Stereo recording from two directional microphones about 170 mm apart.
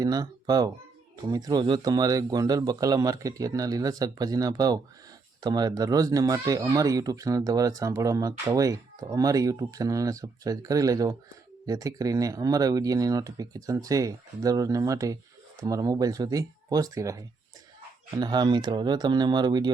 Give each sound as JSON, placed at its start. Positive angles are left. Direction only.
{"t": 0.0, "sound": "speech", "side_deg": -20}